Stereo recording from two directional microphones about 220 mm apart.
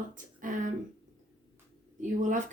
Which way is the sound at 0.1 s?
35° right (ahead or behind).